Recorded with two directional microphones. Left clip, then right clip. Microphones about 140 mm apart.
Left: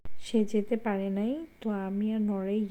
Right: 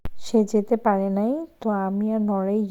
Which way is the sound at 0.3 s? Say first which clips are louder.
Right 8 dB; 40° right (ahead or behind).